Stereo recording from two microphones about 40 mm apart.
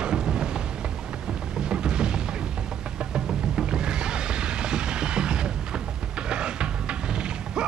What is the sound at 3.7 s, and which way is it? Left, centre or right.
Music, right.